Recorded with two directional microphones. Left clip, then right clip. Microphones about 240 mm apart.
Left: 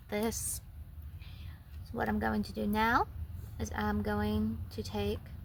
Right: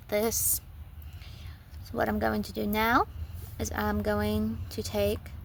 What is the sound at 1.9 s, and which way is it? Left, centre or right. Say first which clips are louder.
Speech: right 5 dB; right.